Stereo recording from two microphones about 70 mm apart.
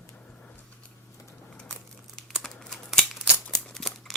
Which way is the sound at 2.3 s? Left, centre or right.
Centre.